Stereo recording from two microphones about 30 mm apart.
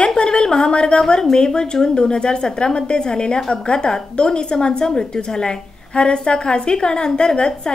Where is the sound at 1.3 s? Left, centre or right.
Left.